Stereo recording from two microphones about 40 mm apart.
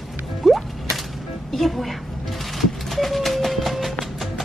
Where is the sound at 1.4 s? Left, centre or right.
Centre.